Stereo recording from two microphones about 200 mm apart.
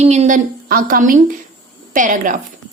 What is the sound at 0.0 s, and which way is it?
A woman's voice, 35° right (ahead or behind).